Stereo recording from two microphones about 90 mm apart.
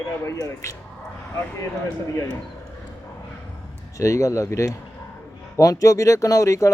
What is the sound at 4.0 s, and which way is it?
Speech, 35° left (ahead or behind).